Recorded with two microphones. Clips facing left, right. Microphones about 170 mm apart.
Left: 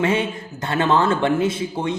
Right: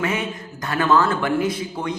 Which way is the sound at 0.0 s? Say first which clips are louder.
Left 4 dB; 30° left (ahead or behind).